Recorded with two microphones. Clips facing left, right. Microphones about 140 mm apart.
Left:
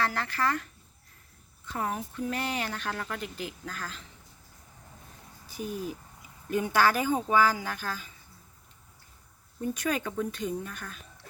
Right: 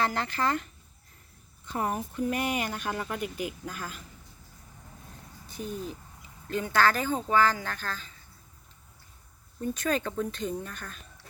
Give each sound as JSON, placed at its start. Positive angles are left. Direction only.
{"t": 0.0, "sound": "speech", "side_deg": -20}
{"t": 5.5, "sound": "speech", "side_deg": 5}
{"t": 9.6, "sound": "speech", "side_deg": 10}